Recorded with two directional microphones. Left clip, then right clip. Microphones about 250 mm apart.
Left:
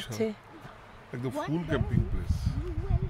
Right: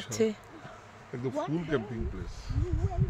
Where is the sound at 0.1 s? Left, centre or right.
Centre.